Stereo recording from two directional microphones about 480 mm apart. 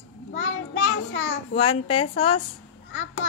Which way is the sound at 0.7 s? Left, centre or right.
Left.